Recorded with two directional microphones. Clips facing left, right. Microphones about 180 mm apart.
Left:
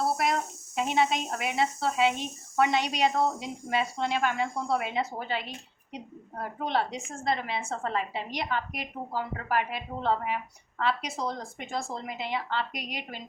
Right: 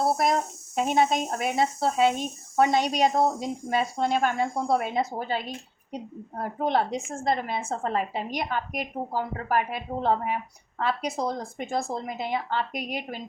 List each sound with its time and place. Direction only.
0.0 s speech: 40° right (ahead or behind)